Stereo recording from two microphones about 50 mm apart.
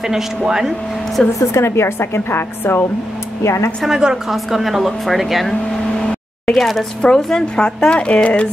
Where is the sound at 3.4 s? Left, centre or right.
Left.